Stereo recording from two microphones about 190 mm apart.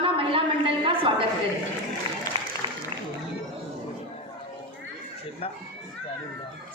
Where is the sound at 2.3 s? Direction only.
30° right (ahead or behind).